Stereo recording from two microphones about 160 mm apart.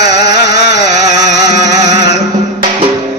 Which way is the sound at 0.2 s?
90° left.